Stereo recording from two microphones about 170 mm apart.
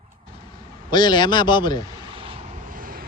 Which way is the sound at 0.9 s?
25° left (ahead or behind).